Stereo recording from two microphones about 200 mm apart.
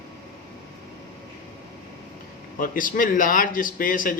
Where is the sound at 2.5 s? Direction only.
45° left (ahead or behind).